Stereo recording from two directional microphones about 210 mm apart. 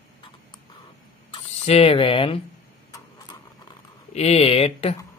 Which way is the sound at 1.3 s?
30° left (ahead or behind).